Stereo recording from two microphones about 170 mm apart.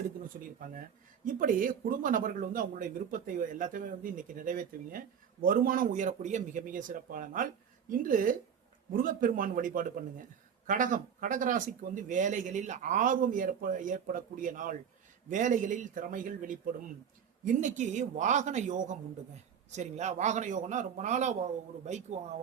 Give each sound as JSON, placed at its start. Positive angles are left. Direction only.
{"t": 0.6, "sound": "speech", "side_deg": -50}